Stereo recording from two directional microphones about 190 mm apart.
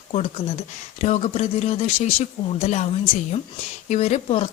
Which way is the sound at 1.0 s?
35° left (ahead or behind).